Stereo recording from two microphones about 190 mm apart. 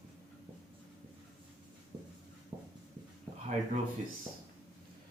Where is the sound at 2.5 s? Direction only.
15° right (ahead or behind).